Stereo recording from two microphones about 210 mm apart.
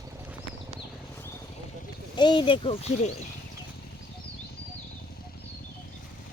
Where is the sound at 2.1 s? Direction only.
20° left (ahead or behind).